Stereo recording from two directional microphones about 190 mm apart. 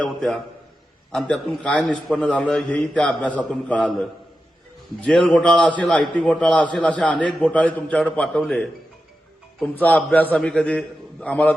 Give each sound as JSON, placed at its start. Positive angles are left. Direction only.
{"t": 0.0, "sound": "a man's voice", "side_deg": 0}